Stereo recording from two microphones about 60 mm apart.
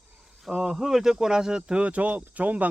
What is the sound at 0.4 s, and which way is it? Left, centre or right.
Speech, centre.